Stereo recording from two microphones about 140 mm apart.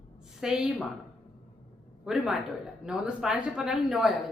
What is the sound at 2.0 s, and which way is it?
A woman's voice, 5° right (ahead or behind).